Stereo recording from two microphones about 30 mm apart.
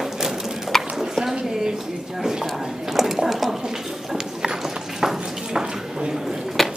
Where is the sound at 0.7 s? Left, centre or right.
Centre.